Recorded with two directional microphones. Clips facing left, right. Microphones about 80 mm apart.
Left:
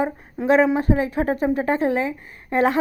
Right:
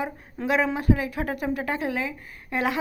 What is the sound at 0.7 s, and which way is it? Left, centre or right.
Speech, left.